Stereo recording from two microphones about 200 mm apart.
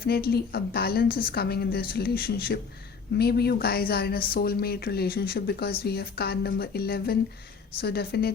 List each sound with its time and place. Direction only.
0.0 s a woman's voice: 50° left (ahead or behind)